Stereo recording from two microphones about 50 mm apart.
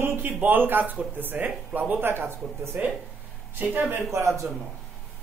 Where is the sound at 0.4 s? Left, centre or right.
Right.